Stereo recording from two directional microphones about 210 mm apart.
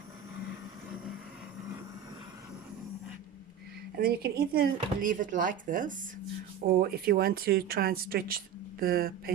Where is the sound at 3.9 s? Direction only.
45° right (ahead or behind).